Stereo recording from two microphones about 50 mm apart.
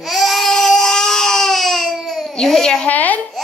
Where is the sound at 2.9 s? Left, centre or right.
Left.